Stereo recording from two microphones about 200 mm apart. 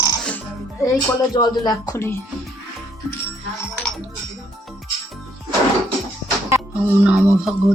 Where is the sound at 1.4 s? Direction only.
20° left (ahead or behind).